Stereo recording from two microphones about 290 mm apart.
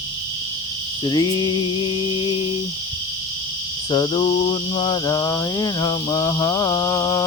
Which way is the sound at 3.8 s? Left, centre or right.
Centre.